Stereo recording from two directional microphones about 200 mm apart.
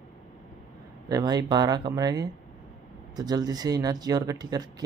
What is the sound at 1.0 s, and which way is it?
Speech, 20° right (ahead or behind).